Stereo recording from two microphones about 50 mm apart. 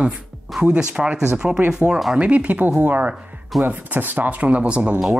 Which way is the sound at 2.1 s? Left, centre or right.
Right.